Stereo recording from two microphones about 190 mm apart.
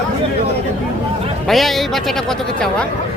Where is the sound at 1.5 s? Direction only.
Centre (ahead or behind).